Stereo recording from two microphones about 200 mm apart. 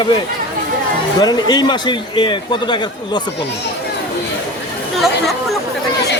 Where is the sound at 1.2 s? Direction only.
20° left (ahead or behind).